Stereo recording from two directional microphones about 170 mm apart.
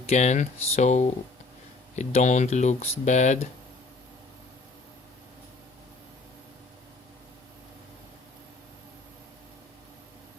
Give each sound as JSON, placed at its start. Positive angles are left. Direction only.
{"t": 0.0, "sound": "speech", "side_deg": 40}